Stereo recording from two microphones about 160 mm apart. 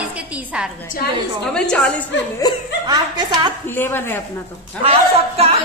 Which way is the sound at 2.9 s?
25° right (ahead or behind).